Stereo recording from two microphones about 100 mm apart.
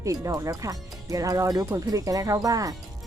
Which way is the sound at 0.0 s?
35° right (ahead or behind).